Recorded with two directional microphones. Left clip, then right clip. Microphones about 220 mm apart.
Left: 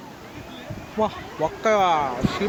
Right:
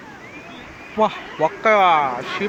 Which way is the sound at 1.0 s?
5° right (ahead or behind).